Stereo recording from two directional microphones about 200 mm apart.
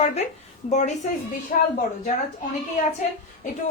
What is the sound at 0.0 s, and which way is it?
Speech, 30° left (ahead or behind).